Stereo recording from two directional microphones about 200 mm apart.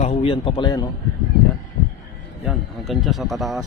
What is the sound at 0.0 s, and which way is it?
Speech, 30° left (ahead or behind).